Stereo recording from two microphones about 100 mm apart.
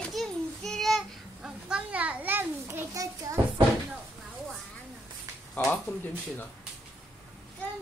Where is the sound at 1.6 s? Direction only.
10° right (ahead or behind).